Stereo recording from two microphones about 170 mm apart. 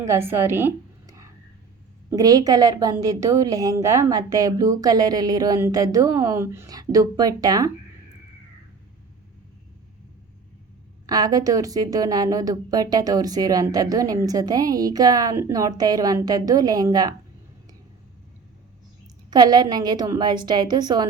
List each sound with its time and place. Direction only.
0.0 s a woman's voice: 15° right (ahead or behind)
11.0 s a woman's voice: 20° right (ahead or behind)
19.3 s a woman's voice: 25° right (ahead or behind)